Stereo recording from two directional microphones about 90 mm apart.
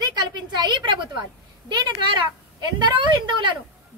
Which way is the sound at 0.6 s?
60° right (ahead or behind).